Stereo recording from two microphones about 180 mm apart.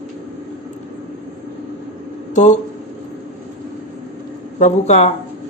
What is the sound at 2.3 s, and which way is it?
Speech, 40° left (ahead or behind).